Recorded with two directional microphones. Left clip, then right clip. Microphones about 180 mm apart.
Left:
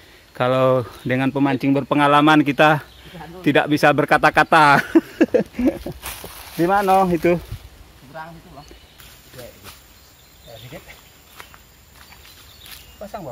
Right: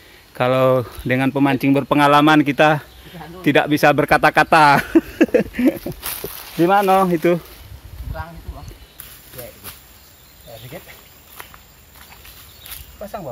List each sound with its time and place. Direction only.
0.3 s speech: 5° left (ahead or behind)
7.1 s speech: 10° left (ahead or behind)
8.1 s a sound: centre (ahead or behind)
10.8 s speech: 20° right (ahead or behind)
13.0 s speech: 15° right (ahead or behind)